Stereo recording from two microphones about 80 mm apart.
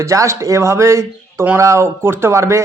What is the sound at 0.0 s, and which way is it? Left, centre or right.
Speech, right.